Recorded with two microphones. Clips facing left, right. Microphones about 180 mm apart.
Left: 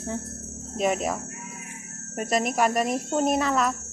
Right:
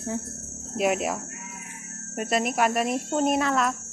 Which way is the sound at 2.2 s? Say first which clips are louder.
Left 1 dB; centre (ahead or behind).